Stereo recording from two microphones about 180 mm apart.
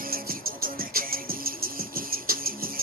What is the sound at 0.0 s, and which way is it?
Music, 55° right (ahead or behind).